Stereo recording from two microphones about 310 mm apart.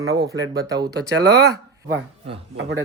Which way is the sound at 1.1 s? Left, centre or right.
Right.